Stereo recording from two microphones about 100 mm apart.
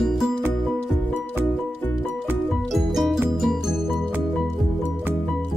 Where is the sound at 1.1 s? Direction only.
20° left (ahead or behind).